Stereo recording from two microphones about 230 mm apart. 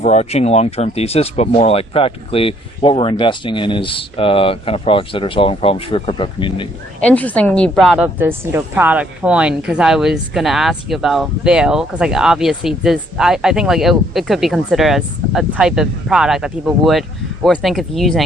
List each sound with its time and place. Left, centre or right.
0.0 s speech: left
7.0 s a woman's voice: centre